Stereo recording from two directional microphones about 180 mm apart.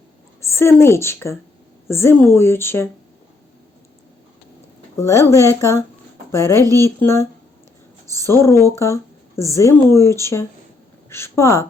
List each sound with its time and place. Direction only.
0.5 s speech: 15° left (ahead or behind)
4.9 s speech: 15° left (ahead or behind)